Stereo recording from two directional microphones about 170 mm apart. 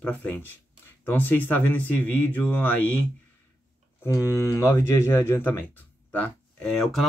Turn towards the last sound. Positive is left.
turn(degrees=5)  # may be behind; listen again after turning